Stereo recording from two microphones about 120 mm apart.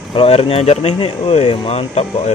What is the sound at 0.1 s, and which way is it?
Speech, 55° left (ahead or behind).